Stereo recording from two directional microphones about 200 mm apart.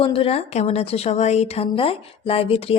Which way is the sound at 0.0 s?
25° left (ahead or behind).